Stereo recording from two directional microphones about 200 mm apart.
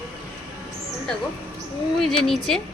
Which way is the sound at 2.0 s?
Centre (ahead or behind).